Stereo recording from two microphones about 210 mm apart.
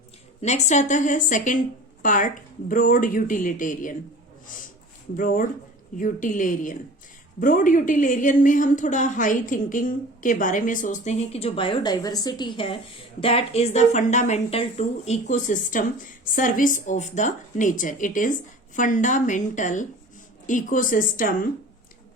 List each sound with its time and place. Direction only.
0.4 s a woman's voice: 35° left (ahead or behind)
5.1 s a woman's voice: 40° left (ahead or behind)